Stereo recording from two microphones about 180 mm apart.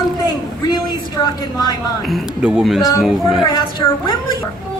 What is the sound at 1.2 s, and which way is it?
Speech, 20° left (ahead or behind).